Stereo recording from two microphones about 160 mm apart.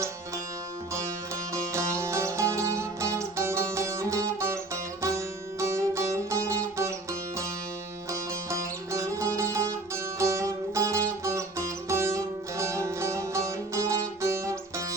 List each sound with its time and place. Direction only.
1.5 s music: 20° right (ahead or behind)